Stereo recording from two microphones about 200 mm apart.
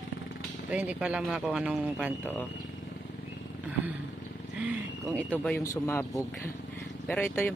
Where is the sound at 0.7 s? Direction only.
5° right (ahead or behind).